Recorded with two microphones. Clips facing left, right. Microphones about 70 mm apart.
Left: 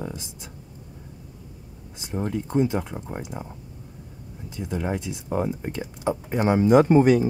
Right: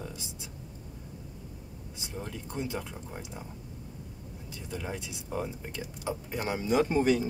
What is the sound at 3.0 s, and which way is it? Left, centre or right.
Speech, left.